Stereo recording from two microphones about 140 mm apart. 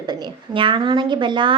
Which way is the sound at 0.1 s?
40° right (ahead or behind).